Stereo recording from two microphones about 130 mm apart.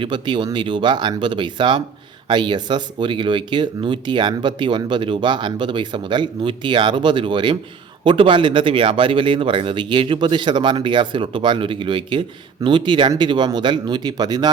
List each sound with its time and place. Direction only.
0.0 s speech: 35° right (ahead or behind)